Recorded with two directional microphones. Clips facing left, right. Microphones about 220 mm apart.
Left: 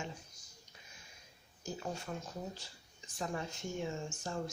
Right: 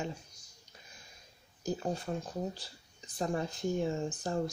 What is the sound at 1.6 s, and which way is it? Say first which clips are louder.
Speech: right 7 dB; 35° right (ahead or behind).